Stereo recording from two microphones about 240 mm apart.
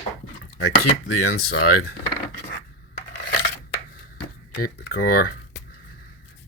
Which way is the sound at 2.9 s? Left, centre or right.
Left.